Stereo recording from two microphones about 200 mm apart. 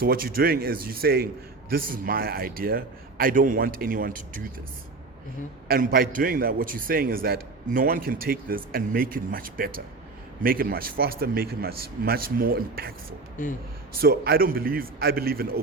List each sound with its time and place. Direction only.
0.0 s a man's voice: 50° right (ahead or behind)
5.6 s a man's voice: 50° right (ahead or behind)